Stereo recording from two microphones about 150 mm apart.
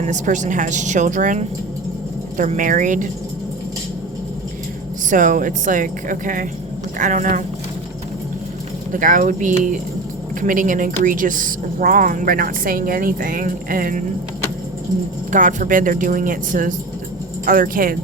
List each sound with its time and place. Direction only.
0.0 s a woman's voice: 55° right (ahead or behind)
5.0 s a woman's voice: 60° right (ahead or behind)
8.9 s a woman's voice: 60° right (ahead or behind)
15.3 s a woman's voice: 55° right (ahead or behind)